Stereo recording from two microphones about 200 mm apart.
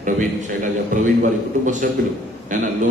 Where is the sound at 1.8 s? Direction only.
40° right (ahead or behind).